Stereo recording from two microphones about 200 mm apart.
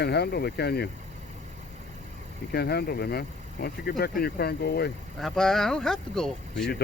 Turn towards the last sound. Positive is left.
turn(degrees=0)  # may be behind; listen again after turning